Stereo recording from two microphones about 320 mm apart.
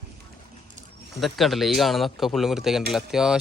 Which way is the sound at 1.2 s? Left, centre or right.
Centre.